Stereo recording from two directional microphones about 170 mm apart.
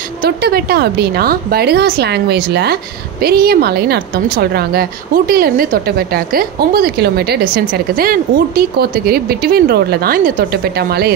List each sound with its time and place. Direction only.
0.2 s a woman's voice: 65° right (ahead or behind)